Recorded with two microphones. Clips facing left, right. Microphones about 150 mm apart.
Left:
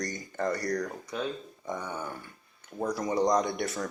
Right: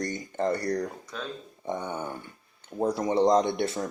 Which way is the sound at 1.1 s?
15° left (ahead or behind).